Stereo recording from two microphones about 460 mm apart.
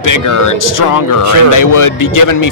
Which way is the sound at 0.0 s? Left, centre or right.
Left.